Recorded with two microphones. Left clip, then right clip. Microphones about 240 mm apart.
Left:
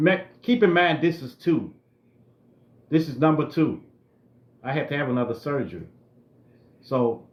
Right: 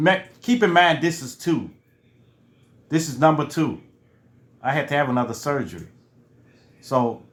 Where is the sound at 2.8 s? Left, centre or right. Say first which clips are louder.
Right 3 dB; centre.